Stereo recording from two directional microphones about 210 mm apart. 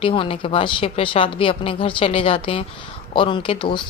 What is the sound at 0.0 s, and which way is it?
A woman's voice, 25° left (ahead or behind).